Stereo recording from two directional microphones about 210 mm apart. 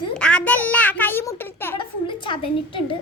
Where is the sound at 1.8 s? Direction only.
25° left (ahead or behind).